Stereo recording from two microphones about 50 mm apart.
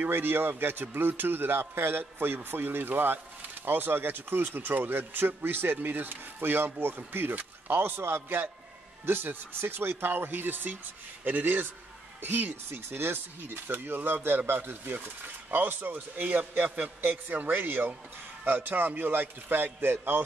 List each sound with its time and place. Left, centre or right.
0.0 s a man's voice: right